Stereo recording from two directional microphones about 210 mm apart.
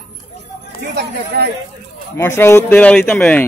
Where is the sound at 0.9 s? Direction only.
50° right (ahead or behind).